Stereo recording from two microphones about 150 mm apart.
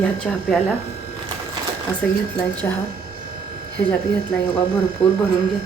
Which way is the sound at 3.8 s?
15° left (ahead or behind).